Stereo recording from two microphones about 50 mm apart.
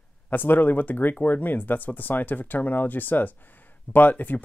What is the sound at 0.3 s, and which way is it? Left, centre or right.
Speech, left.